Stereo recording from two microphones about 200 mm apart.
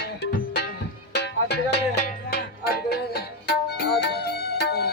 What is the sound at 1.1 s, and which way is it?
Music, 55° left (ahead or behind).